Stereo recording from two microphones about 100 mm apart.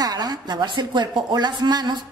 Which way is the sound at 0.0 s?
40° right (ahead or behind).